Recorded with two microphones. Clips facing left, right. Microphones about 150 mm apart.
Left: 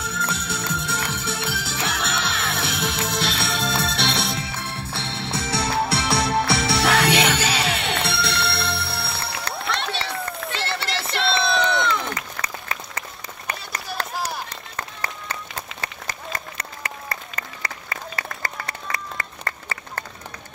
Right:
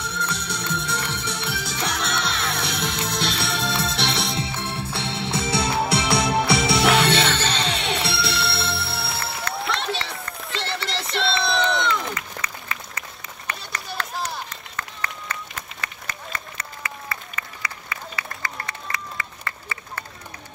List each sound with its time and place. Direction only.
0.0 s music: 5° left (ahead or behind)
4.4 s music: 25° right (ahead or behind)
7.1 s music: 10° left (ahead or behind)
9.6 s a sound: centre (ahead or behind)
14.8 s run: 35° left (ahead or behind)
17.1 s applause: 45° left (ahead or behind)
18.7 s run: 45° left (ahead or behind)